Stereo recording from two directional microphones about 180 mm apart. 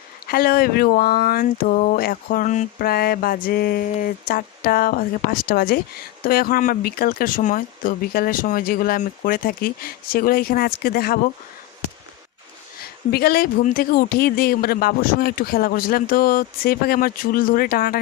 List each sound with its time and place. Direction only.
0.3 s speech: 55° left (ahead or behind)
13.1 s speech: 60° left (ahead or behind)